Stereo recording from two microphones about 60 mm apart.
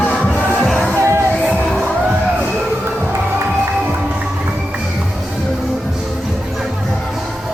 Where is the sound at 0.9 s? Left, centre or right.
Right.